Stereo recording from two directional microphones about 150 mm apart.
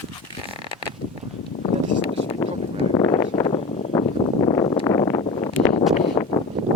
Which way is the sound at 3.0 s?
25° left (ahead or behind).